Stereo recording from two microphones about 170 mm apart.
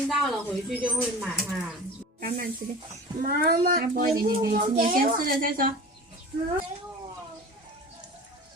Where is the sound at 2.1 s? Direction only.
55° right (ahead or behind).